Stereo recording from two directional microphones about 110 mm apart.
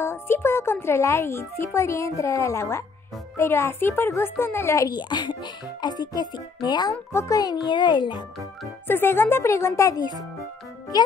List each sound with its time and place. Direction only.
0.0 s speech: 20° left (ahead or behind)
4.9 s a child's voice: 40° left (ahead or behind)
8.8 s speech: 20° left (ahead or behind)